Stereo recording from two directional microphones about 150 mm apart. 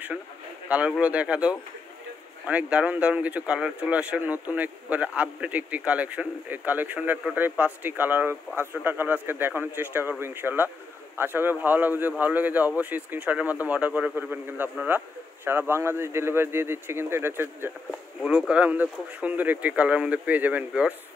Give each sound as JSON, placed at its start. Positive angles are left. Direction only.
{"t": 0.7, "sound": "speech", "side_deg": -5}